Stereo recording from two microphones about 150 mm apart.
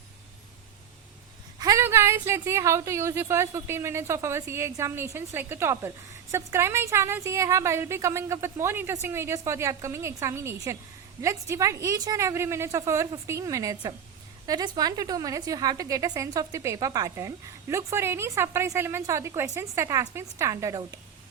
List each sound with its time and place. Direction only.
1.5 s a woman's voice: 25° right (ahead or behind)